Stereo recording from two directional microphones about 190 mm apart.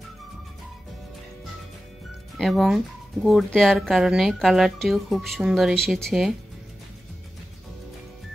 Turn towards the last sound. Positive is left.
turn(degrees=0)  # may be behind; listen again after turning